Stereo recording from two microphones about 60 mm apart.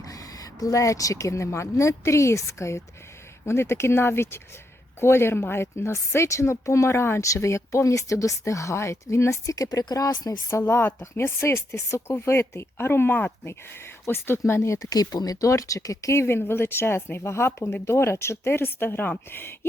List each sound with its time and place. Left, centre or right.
0.0 s a woman's voice: left
10.5 s a woman's voice: left
13.5 s a woman's voice: left
14.8 s speech: left
16.2 s a woman's voice: left